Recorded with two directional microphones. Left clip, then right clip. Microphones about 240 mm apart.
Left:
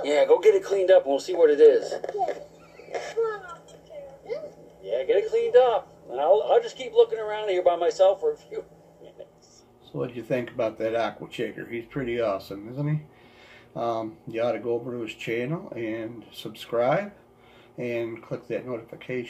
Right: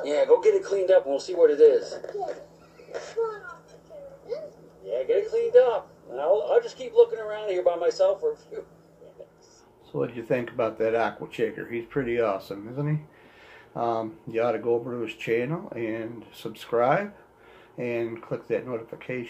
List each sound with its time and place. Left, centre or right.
0.0 s a man's voice: left
5.1 s a man's voice: left
9.9 s speech: centre